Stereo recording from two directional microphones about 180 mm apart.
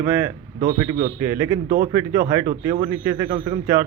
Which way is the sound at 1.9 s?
15° right (ahead or behind).